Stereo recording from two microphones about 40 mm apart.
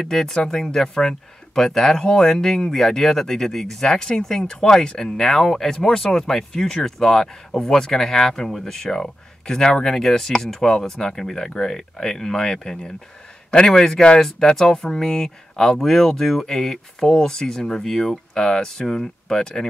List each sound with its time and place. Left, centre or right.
0.0 s speech: centre
5.1 s speech: centre